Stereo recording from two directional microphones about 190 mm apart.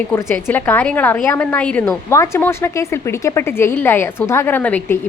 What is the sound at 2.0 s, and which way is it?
Speech, 15° left (ahead or behind).